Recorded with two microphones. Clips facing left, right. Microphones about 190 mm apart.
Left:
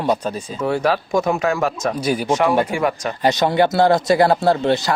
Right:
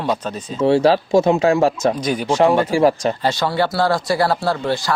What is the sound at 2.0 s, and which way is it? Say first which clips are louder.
Speech: left 1 dB; 10° left (ahead or behind).